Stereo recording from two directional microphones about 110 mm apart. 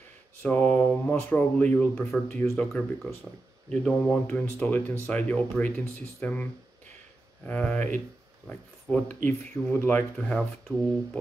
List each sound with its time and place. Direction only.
0.4 s speech: 15° left (ahead or behind)
7.4 s speech: 15° left (ahead or behind)